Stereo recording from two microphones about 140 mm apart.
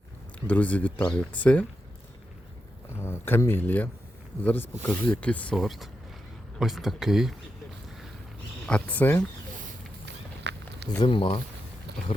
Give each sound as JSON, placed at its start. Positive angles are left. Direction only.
{"t": 0.4, "sound": "speech", "side_deg": 10}
{"t": 3.0, "sound": "speech", "side_deg": 15}
{"t": 8.6, "sound": "speech", "side_deg": 10}
{"t": 11.0, "sound": "speech", "side_deg": 40}